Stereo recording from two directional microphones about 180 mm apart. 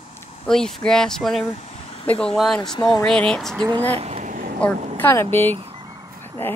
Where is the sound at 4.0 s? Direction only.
35° right (ahead or behind).